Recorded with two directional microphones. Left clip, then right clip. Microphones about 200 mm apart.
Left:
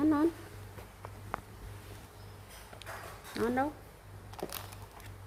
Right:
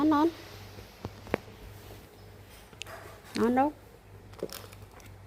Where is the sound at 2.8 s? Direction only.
40° right (ahead or behind).